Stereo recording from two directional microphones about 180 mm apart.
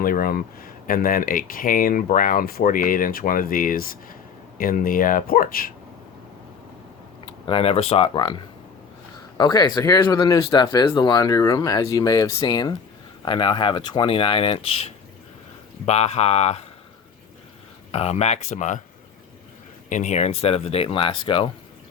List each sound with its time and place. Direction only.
0.0 s speech: 55° left (ahead or behind)
7.3 s speech: 30° left (ahead or behind)
9.4 s speech: 20° left (ahead or behind)
17.9 s speech: 35° left (ahead or behind)
19.9 s speech: 40° left (ahead or behind)